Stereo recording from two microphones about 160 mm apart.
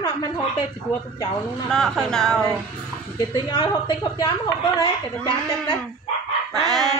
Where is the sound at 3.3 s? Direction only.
30° left (ahead or behind).